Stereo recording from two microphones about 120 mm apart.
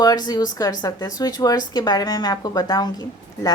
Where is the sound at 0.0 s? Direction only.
35° left (ahead or behind).